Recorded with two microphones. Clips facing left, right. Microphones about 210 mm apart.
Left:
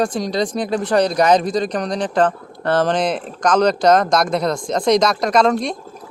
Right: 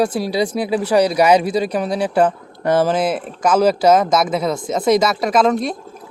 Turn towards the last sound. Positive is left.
turn(degrees=0)  # may be behind; listen again after turning